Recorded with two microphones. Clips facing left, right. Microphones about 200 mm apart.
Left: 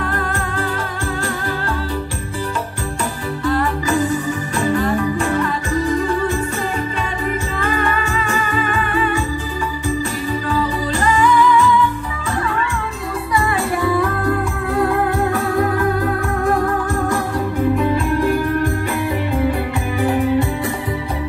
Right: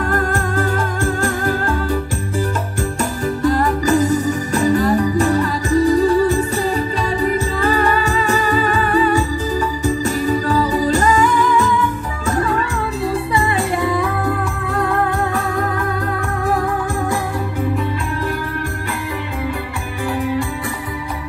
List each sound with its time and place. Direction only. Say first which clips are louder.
0.1 s music: right 4 dB; 45° right (ahead or behind)
3.4 s music: right 3 dB; 40° right (ahead or behind)